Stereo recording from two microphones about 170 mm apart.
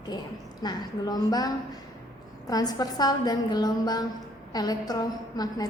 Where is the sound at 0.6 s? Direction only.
25° left (ahead or behind).